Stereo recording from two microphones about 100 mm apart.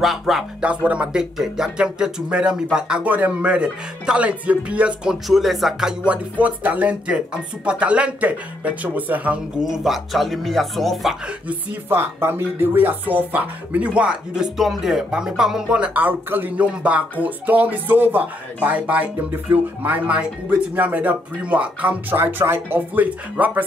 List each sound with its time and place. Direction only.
0.0 s speech: centre (ahead or behind)
5.3 s speech: centre (ahead or behind)
6.4 s speech: 15° right (ahead or behind)
11.4 s speech: 20° right (ahead or behind)